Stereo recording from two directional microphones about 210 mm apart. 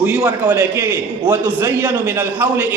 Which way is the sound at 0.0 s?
5° right (ahead or behind).